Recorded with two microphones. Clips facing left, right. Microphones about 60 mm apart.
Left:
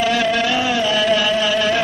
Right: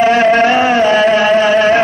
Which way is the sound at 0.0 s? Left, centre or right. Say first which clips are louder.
Right 8 dB; right.